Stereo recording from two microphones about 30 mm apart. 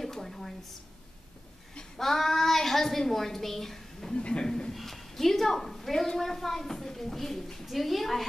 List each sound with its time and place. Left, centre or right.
0.0 s a sound: centre
2.0 s a woman's voice: centre
4.5 s a man's voice: left
4.7 s a woman's voice: centre
7.6 s a woman's voice: centre